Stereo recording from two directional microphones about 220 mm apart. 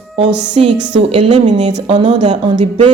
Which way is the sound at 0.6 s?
30° right (ahead or behind).